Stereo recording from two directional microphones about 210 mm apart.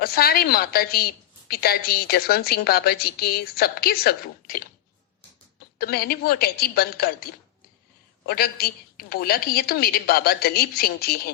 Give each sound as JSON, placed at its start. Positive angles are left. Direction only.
{"t": 0.0, "sound": "a woman's voice", "side_deg": 45}
{"t": 5.8, "sound": "a woman's voice", "side_deg": 45}
{"t": 8.3, "sound": "a woman's voice", "side_deg": 45}